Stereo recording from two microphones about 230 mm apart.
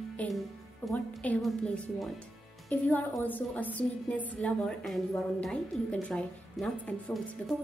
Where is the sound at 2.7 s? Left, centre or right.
Centre.